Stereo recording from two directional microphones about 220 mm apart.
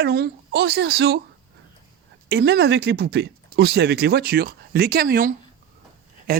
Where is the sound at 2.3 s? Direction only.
45° right (ahead or behind).